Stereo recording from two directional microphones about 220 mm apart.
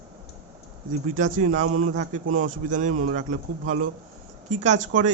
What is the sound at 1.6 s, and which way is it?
Speech, 75° right (ahead or behind).